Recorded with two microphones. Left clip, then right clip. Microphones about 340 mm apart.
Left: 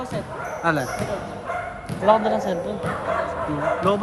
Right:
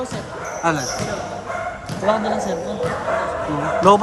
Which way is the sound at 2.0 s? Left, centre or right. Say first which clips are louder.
Left 1 dB; centre.